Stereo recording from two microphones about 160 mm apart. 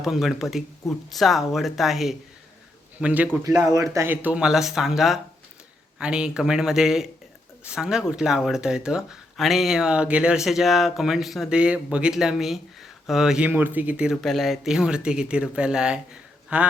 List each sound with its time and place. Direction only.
0.0 s a man's voice: centre (ahead or behind)
3.4 s a man's voice: 20° right (ahead or behind)